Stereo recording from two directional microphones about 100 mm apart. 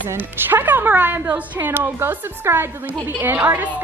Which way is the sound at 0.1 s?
20° right (ahead or behind).